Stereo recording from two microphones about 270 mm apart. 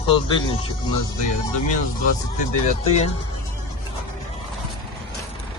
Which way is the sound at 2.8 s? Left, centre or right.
Left.